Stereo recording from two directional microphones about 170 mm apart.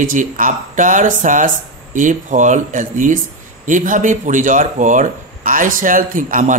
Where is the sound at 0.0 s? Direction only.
50° right (ahead or behind).